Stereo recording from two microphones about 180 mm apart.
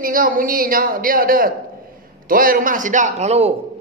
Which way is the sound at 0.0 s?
50° right (ahead or behind).